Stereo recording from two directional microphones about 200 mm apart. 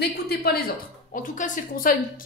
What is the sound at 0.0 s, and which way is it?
A woman's voice, 50° left (ahead or behind).